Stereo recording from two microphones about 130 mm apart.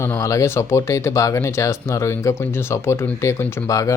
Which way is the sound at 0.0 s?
20° left (ahead or behind).